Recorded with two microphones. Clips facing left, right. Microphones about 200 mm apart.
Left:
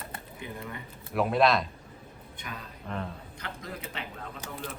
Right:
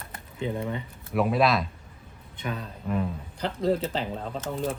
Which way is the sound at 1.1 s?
Centre (ahead or behind).